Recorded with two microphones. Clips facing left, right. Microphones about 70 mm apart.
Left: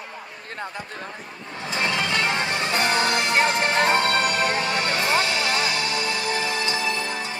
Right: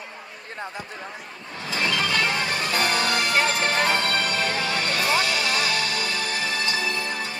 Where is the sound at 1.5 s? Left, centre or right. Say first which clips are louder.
Left 1 dB; left.